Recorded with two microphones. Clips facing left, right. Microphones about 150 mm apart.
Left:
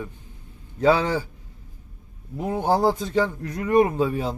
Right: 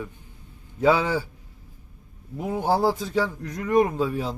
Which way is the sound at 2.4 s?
Centre (ahead or behind).